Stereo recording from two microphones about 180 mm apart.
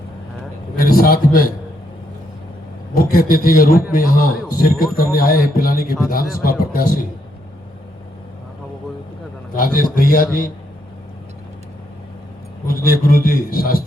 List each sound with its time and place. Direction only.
0.8 s a man's voice: 55° left (ahead or behind)
2.9 s speech: 55° left (ahead or behind)
9.6 s speech: 50° left (ahead or behind)
12.6 s speech: 55° left (ahead or behind)